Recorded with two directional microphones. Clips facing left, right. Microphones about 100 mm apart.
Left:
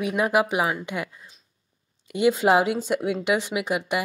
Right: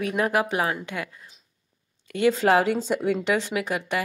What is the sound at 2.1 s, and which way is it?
Speech, 15° left (ahead or behind).